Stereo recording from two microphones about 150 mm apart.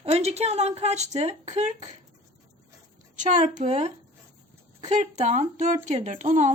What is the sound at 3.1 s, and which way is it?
Speech, 55° right (ahead or behind).